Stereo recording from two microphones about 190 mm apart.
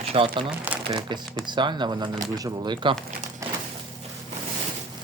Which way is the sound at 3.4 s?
15° right (ahead or behind).